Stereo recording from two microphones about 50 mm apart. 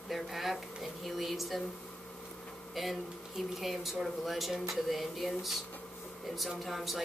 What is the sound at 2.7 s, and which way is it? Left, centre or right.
Speech, centre.